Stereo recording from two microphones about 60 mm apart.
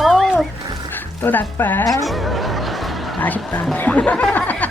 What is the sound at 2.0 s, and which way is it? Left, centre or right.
Fowl, centre.